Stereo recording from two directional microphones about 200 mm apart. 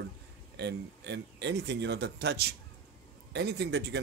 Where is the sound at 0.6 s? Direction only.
60° right (ahead or behind).